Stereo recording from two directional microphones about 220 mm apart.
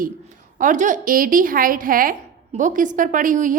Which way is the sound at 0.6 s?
35° right (ahead or behind).